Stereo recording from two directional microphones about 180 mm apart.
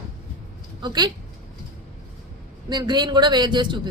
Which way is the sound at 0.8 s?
25° right (ahead or behind).